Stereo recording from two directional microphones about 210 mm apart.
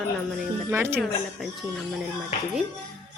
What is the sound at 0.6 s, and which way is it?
Speech, 10° right (ahead or behind).